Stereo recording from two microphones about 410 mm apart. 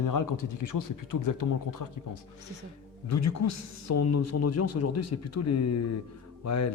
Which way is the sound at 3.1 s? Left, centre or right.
Left.